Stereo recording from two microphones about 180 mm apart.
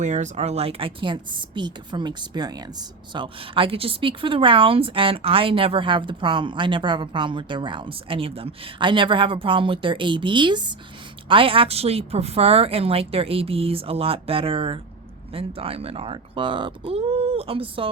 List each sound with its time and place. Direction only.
0.0 s a woman's voice: 40° right (ahead or behind)